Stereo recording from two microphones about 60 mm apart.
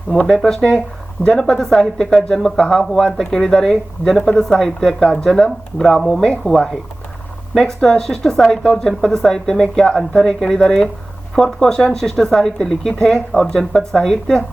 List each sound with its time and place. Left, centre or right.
0.3 s speech: centre